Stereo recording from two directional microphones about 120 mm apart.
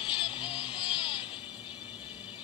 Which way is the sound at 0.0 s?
50° left (ahead or behind).